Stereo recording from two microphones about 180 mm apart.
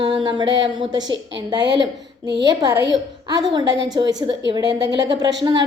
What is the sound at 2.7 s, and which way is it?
Speech, 70° right (ahead or behind).